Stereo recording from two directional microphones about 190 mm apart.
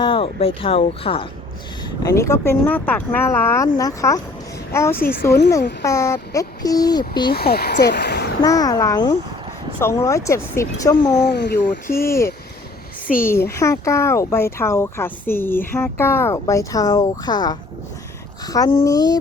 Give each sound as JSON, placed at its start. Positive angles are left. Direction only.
{"t": 0.0, "sound": "speech", "side_deg": 30}
{"t": 2.0, "sound": "speech", "side_deg": 15}
{"t": 4.9, "sound": "speech", "side_deg": 50}
{"t": 5.8, "sound": "speech", "side_deg": 15}
{"t": 7.3, "sound": "speech", "side_deg": 55}
{"t": 8.4, "sound": "speech", "side_deg": 20}
{"t": 11.1, "sound": "speech", "side_deg": 65}
{"t": 13.2, "sound": "speech", "side_deg": 15}